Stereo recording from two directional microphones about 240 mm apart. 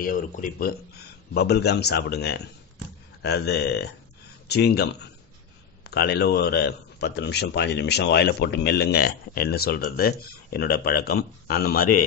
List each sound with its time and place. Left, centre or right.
0.0 s speech: left
5.9 s speech: left